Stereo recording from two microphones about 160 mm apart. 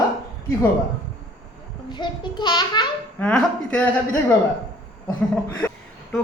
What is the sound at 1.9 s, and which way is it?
Speech, 30° left (ahead or behind).